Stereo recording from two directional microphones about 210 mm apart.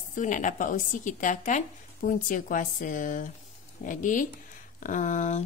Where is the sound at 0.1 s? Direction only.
35° left (ahead or behind).